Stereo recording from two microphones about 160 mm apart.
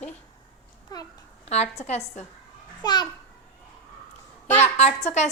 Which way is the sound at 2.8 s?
25° left (ahead or behind).